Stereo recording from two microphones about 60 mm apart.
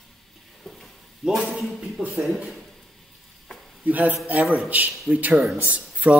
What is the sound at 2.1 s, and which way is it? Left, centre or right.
Speech, centre.